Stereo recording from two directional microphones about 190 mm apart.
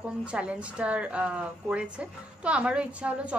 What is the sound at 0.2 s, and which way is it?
A woman's voice, 5° right (ahead or behind).